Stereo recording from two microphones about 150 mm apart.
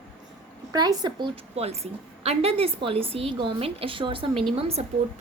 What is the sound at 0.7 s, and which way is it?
A woman's voice, 25° right (ahead or behind).